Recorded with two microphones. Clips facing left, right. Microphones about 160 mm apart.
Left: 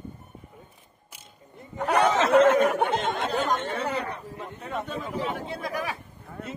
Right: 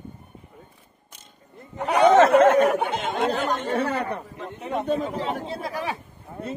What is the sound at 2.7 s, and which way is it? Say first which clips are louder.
Speech: even; centre (ahead or behind).